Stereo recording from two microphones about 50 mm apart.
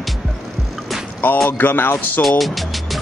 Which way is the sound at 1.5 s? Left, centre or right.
Left.